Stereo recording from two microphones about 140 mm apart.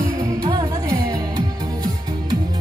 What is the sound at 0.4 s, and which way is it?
Music, 25° right (ahead or behind).